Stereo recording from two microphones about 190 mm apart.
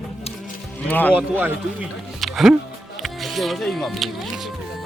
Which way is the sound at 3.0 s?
Centre (ahead or behind).